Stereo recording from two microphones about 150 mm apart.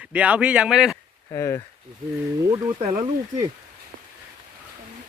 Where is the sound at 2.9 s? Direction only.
25° right (ahead or behind).